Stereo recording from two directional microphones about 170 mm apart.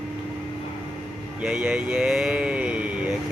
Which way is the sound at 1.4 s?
5° right (ahead or behind).